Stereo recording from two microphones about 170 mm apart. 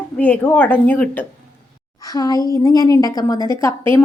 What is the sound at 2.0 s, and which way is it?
A woman's voice, 20° left (ahead or behind).